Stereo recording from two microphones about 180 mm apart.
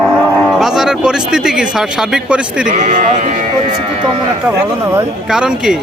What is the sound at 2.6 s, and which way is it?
Speech, 45° right (ahead or behind).